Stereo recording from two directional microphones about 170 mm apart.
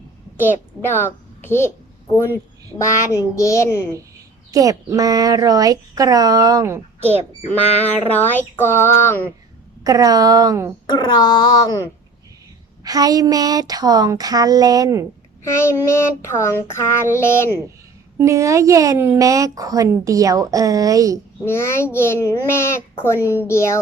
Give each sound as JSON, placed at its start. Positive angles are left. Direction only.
{"t": 0.4, "sound": "a child's voice", "side_deg": 10}
{"t": 2.1, "sound": "child singing", "side_deg": 15}
{"t": 4.5, "sound": "speech", "side_deg": -20}
{"t": 7.4, "sound": "child singing", "side_deg": 10}
{"t": 9.8, "sound": "speech", "side_deg": -20}
{"t": 10.8, "sound": "a child's voice", "side_deg": 25}
{"t": 12.8, "sound": "speech", "side_deg": -20}
{"t": 15.4, "sound": "child singing", "side_deg": 15}
{"t": 18.2, "sound": "speech", "side_deg": -15}
{"t": 21.4, "sound": "child singing", "side_deg": 15}